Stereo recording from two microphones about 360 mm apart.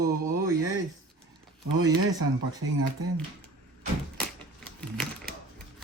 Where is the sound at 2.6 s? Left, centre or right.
Right.